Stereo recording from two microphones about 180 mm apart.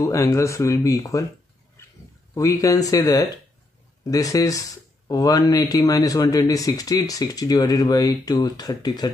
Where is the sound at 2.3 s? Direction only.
20° left (ahead or behind).